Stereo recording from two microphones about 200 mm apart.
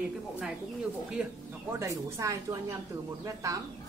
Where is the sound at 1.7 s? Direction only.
15° right (ahead or behind).